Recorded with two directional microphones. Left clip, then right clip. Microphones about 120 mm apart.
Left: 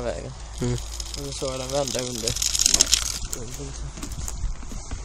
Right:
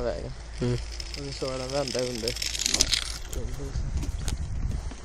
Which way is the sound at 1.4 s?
10° left (ahead or behind).